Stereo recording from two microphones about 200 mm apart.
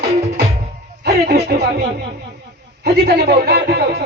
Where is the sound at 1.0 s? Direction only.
55° right (ahead or behind).